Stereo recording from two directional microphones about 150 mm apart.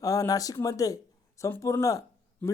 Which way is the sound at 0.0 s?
20° left (ahead or behind).